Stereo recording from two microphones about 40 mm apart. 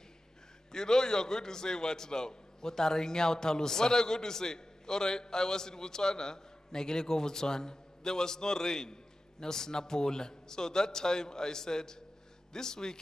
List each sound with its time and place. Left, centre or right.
0.7 s a man's voice: centre